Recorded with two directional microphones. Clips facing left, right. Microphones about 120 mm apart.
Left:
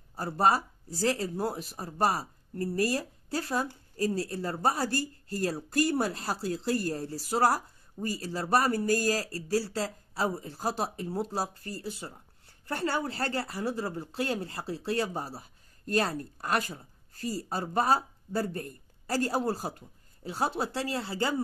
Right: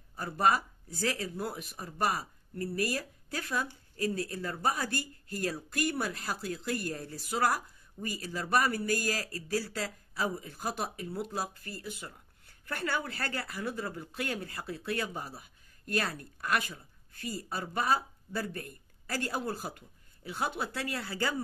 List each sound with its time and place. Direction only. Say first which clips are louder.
0.1 s speech: left 2 dB; 35° left (ahead or behind)